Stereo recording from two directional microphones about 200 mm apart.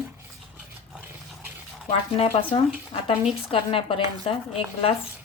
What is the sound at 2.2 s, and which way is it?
A woman's voice, 30° left (ahead or behind).